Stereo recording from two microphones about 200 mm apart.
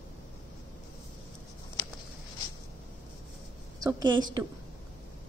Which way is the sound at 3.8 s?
20° right (ahead or behind).